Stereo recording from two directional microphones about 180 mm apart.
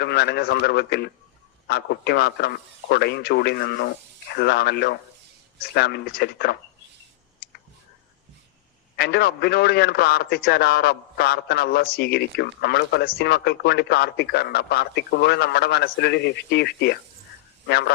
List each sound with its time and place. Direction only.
0.0 s a man's voice: 65° left (ahead or behind)
9.0 s a man's voice: 65° left (ahead or behind)